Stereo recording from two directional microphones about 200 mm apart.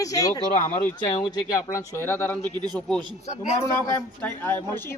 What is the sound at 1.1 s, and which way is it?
Speech, 20° left (ahead or behind).